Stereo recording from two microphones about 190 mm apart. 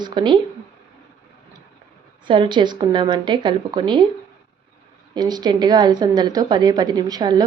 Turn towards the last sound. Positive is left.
turn(degrees=-20)  # may be behind; listen again after turning